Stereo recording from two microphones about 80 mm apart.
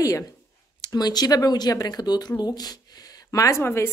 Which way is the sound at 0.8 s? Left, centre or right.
Left.